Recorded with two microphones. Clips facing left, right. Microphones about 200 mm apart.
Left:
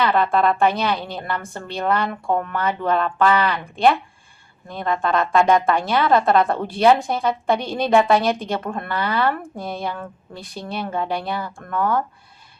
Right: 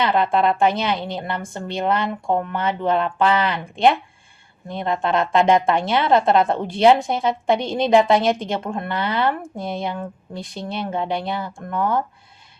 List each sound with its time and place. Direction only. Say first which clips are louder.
0.0 s speech: even; 20° right (ahead or behind)